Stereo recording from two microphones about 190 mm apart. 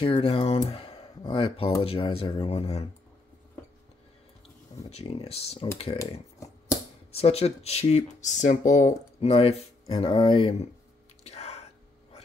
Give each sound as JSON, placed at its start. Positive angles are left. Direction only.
{"t": 0.0, "sound": "speech", "side_deg": 25}
{"t": 4.8, "sound": "speech", "side_deg": 30}
{"t": 7.1, "sound": "speech", "side_deg": 30}
{"t": 11.2, "sound": "whispering", "side_deg": 35}